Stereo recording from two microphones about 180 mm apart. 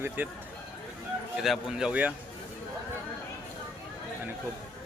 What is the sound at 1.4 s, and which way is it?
Speech, centre (ahead or behind).